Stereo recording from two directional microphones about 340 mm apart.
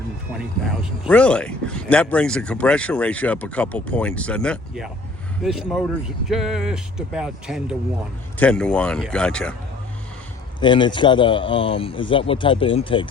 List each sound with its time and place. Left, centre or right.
1.0 s speech: centre
10.6 s speech: centre